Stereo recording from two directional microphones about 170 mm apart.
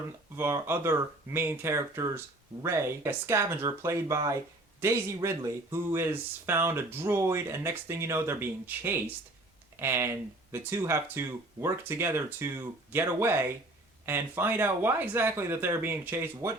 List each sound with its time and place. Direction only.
0.3 s speech: 15° right (ahead or behind)